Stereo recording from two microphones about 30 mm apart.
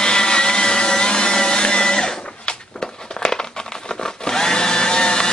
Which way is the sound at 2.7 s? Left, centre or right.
Left.